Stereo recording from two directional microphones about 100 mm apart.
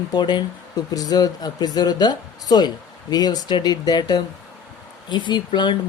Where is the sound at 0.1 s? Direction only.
50° left (ahead or behind).